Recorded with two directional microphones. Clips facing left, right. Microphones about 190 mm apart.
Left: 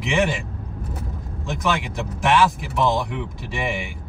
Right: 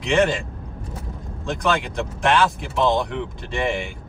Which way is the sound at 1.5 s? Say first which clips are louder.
Right 2 dB; centre (ahead or behind).